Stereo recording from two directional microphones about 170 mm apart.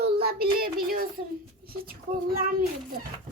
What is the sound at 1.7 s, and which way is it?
Speech, 60° right (ahead or behind).